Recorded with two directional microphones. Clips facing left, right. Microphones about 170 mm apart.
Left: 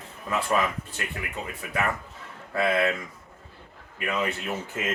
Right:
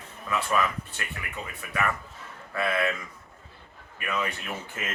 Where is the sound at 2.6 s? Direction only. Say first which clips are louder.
Left 3 dB; 25° left (ahead or behind).